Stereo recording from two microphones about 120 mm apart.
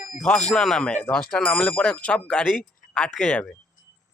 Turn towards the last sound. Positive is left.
turn(degrees=5)  # may be behind; listen again after turning